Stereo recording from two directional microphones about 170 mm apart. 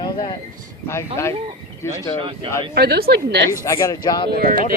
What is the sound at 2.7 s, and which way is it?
Speech, 65° right (ahead or behind).